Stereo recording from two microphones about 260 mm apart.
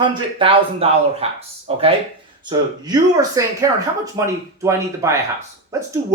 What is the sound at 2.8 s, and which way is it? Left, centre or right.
Speech, centre.